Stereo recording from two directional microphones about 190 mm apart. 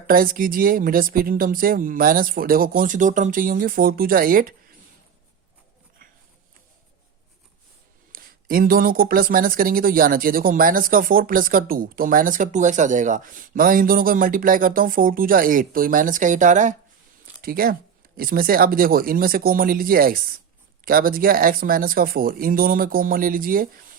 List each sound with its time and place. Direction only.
0.1 s speech: 50° right (ahead or behind)
8.1 s speech: 50° right (ahead or behind)